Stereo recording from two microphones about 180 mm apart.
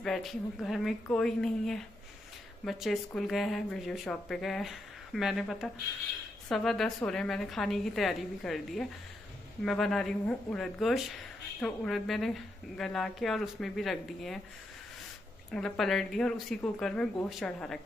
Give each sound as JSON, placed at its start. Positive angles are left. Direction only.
{"t": 0.0, "sound": "speech", "side_deg": 0}
{"t": 15.5, "sound": "speech", "side_deg": 5}